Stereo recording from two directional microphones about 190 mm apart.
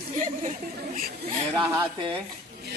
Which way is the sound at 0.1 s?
40° right (ahead or behind).